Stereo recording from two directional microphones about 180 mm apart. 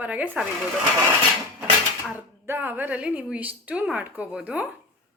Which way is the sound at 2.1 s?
10° right (ahead or behind).